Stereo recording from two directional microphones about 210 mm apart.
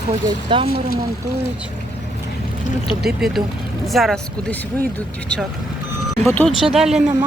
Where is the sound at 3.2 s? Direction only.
Centre (ahead or behind).